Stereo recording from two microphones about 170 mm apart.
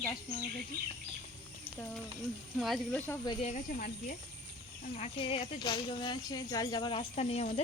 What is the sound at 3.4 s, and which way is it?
Speech, 45° left (ahead or behind).